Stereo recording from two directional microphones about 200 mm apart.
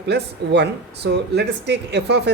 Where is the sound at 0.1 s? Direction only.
55° right (ahead or behind).